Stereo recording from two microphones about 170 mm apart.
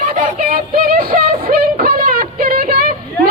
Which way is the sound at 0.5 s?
60° right (ahead or behind).